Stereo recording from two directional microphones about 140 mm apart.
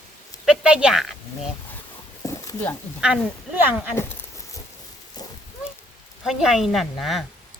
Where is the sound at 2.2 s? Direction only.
25° left (ahead or behind).